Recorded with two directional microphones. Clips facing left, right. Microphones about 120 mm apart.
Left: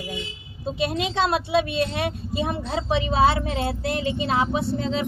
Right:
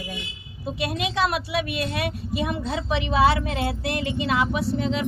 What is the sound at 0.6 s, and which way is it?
A woman's voice, 25° left (ahead or behind).